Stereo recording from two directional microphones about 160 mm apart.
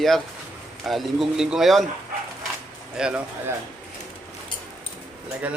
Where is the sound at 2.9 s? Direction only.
5° right (ahead or behind).